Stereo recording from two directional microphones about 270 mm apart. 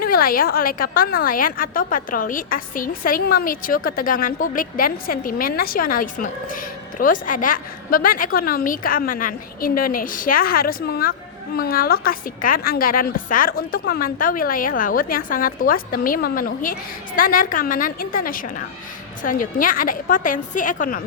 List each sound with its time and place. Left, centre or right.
0.0 s a woman's voice: left